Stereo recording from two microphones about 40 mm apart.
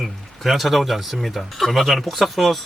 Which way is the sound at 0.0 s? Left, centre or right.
Centre.